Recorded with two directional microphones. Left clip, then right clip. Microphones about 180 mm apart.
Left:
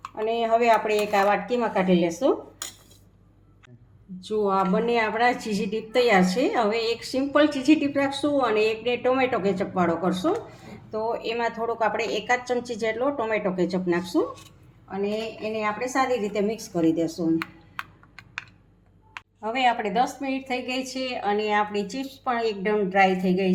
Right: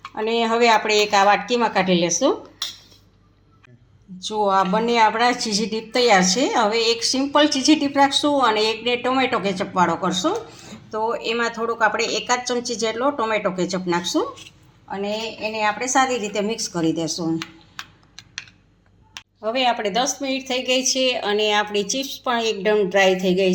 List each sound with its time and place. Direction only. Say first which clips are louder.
0.1 s a woman's voice: right 2 dB; 50° right (ahead or behind)
4.2 s a woman's voice: right 5 dB; 50° right (ahead or behind)
19.4 s a woman's voice: right 3 dB; 50° right (ahead or behind)